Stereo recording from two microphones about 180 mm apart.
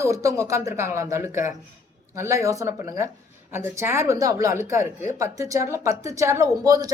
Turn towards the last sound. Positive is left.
turn(degrees=-20)  # may be behind; listen again after turning